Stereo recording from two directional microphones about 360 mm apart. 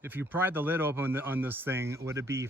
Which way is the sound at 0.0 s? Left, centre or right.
Centre.